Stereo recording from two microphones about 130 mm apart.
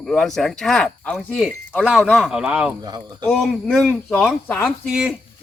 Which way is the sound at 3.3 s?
Centre (ahead or behind).